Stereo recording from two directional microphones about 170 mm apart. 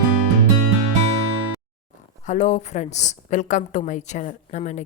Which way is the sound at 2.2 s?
45° left (ahead or behind).